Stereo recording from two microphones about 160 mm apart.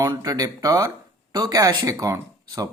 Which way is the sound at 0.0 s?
25° right (ahead or behind).